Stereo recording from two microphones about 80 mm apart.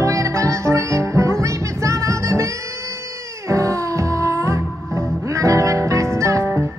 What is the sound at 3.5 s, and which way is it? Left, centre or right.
Music, right.